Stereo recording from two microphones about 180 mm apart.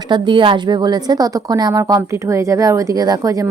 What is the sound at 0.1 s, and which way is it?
A woman's voice, 25° right (ahead or behind).